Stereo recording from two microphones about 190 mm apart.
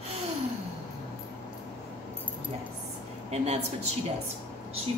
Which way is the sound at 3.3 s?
35° right (ahead or behind).